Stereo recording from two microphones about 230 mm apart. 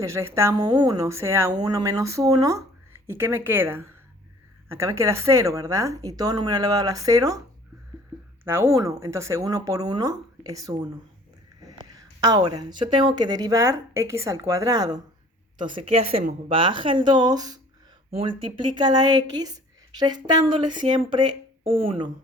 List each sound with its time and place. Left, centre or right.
0.0 s speech: centre
8.4 s a woman's voice: centre